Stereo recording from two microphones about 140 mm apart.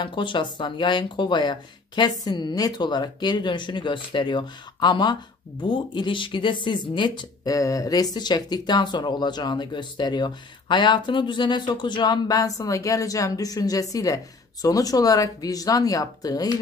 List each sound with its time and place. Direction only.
0.0 s speech: 35° left (ahead or behind)